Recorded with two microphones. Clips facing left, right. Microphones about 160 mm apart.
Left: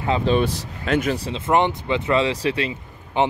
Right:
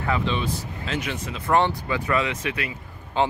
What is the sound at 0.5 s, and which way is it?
Speech, 80° left.